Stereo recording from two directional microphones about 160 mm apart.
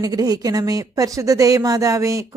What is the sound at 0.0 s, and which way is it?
Speech, 25° right (ahead or behind).